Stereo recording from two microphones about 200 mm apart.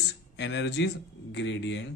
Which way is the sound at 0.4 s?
60° left (ahead or behind).